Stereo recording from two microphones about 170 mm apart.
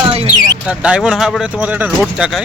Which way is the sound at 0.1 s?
30° right (ahead or behind).